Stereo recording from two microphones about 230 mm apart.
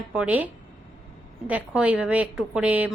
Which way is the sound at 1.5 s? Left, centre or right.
Centre.